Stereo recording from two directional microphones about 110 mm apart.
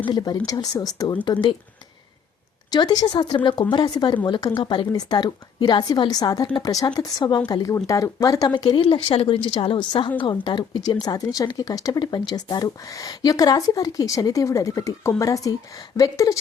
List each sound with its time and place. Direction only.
0.0 s speech: 40° left (ahead or behind)
2.6 s speech: 40° left (ahead or behind)